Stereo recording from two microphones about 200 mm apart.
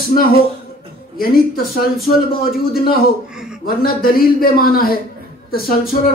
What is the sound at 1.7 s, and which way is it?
A man's voice, 50° left (ahead or behind).